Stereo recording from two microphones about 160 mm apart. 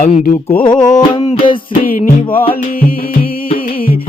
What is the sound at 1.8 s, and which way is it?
Music, 60° left (ahead or behind).